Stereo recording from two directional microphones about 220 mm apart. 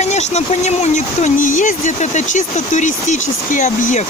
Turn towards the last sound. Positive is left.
turn(degrees=35)  # may be behind; listen again after turning